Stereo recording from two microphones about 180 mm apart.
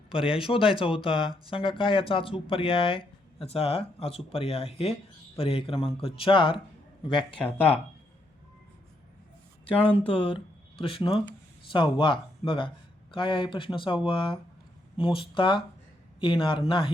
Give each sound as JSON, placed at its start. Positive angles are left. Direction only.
{"t": 0.1, "sound": "speech", "side_deg": 30}
{"t": 10.1, "sound": "speech", "side_deg": 30}